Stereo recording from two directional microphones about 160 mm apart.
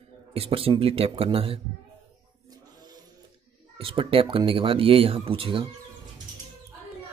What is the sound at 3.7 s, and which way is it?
Speech, 35° right (ahead or behind).